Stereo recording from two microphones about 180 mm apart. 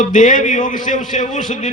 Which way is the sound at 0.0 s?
45° left (ahead or behind).